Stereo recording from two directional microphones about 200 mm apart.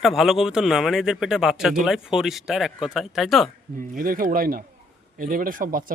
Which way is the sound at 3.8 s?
45° right (ahead or behind).